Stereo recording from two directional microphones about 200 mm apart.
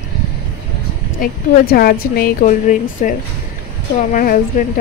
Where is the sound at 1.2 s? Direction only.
50° left (ahead or behind).